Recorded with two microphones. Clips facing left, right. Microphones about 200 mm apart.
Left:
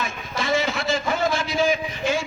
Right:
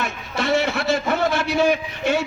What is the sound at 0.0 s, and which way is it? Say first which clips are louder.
A man's voice: right 3 dB; 65° right (ahead or behind).